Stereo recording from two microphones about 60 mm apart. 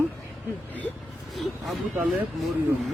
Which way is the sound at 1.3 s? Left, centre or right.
Centre.